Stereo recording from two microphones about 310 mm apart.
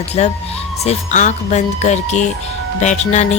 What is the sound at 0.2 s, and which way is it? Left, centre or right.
Speech, left.